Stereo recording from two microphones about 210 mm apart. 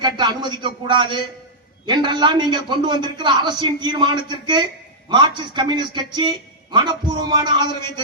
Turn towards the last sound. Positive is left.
turn(degrees=-20)  # may be behind; listen again after turning